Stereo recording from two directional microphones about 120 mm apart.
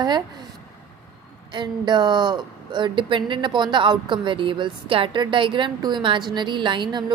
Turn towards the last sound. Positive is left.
turn(degrees=-40)  # may be behind; listen again after turning